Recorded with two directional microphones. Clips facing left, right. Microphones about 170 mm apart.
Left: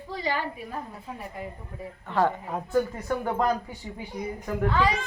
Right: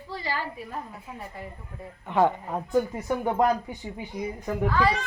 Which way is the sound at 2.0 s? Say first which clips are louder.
Right 2 dB; 15° right (ahead or behind).